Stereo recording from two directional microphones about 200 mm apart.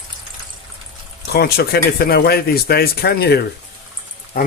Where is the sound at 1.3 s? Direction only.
50° left (ahead or behind).